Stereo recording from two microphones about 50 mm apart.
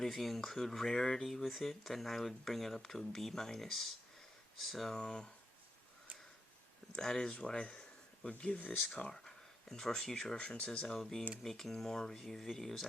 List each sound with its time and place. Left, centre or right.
0.0 s speech: centre
4.9 s speech: centre
6.9 s speech: centre
10.3 s speech: left